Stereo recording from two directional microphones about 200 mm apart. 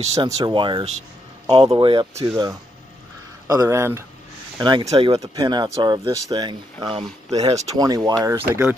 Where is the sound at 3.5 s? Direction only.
15° right (ahead or behind).